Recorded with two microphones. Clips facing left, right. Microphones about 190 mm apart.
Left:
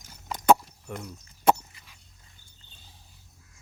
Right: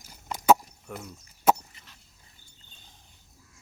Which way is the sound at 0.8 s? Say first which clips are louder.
Left 2 dB; centre (ahead or behind).